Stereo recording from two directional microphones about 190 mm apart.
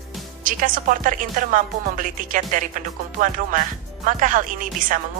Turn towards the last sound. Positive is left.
turn(degrees=-45)  # may be behind; listen again after turning